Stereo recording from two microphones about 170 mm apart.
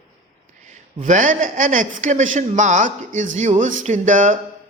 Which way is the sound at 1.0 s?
50° right (ahead or behind).